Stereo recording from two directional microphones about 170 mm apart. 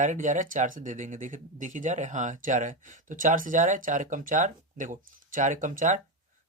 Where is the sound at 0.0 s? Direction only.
50° right (ahead or behind).